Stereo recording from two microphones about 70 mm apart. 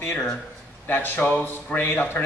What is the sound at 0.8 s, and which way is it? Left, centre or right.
Speech, left.